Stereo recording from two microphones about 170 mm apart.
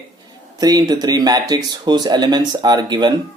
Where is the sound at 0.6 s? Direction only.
25° right (ahead or behind).